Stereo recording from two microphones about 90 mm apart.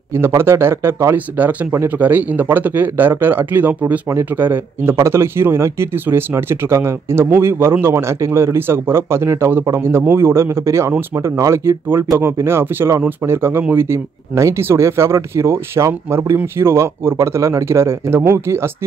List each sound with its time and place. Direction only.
0.4 s a man's voice: 25° right (ahead or behind)
1.1 s a man's voice: 20° right (ahead or behind)